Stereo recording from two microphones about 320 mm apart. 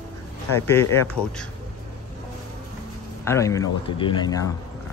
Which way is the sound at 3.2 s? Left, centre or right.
Centre.